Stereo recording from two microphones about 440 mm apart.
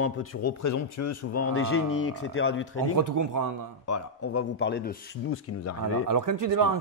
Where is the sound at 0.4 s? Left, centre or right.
Left.